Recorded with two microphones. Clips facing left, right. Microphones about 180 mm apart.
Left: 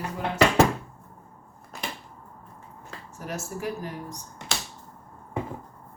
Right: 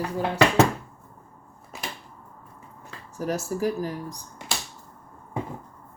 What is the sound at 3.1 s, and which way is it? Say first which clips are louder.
Speech: right 7 dB; 35° right (ahead or behind).